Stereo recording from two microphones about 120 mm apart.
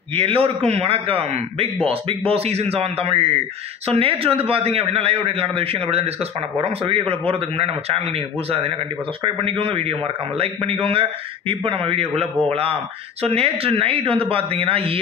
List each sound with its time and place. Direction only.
0.1 s a man's voice: 55° right (ahead or behind)